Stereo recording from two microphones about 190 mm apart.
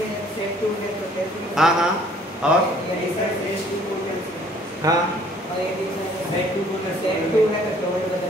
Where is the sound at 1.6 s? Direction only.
5° right (ahead or behind).